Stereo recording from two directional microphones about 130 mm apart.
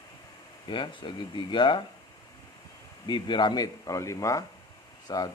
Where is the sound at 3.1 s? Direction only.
35° left (ahead or behind).